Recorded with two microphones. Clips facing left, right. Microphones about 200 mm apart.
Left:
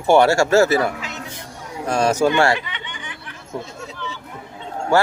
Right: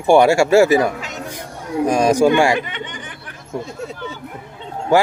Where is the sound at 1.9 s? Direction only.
15° right (ahead or behind).